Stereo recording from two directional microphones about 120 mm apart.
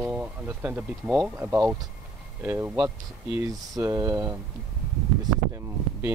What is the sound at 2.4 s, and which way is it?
Speech, 15° right (ahead or behind).